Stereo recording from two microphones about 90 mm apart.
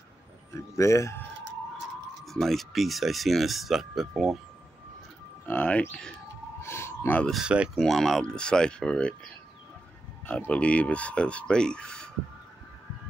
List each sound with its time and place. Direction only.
0.6 s speech: 35° left (ahead or behind)
2.2 s speech: 5° left (ahead or behind)
5.5 s speech: 20° left (ahead or behind)
6.6 s a sound: 30° left (ahead or behind)
7.4 s speech: 10° right (ahead or behind)
7.7 s speech: 5° left (ahead or behind)
10.2 s speech: 15° left (ahead or behind)